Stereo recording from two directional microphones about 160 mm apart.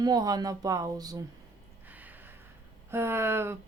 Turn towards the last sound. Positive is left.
turn(degrees=-15)  # may be behind; listen again after turning